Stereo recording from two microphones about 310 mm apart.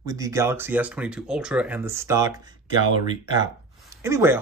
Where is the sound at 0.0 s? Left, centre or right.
Centre.